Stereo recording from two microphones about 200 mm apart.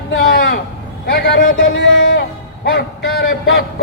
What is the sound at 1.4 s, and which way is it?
Speech, 40° left (ahead or behind).